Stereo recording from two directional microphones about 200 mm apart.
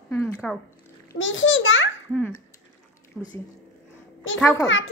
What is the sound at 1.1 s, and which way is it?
Speech, 70° left (ahead or behind).